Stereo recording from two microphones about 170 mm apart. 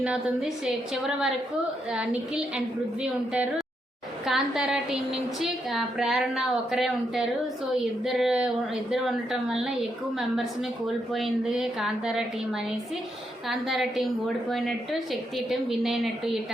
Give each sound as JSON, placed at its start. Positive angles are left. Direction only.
{"t": 0.0, "sound": "a woman's voice", "side_deg": -5}
{"t": 4.3, "sound": "a woman's voice", "side_deg": 0}
{"t": 13.5, "sound": "a woman's voice", "side_deg": 0}
{"t": 15.1, "sound": "a woman's voice", "side_deg": 0}